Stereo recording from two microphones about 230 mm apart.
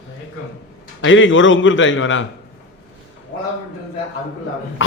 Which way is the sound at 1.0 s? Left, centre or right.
Left.